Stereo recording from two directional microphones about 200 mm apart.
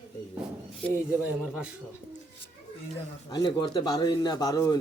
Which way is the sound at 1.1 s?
5° right (ahead or behind).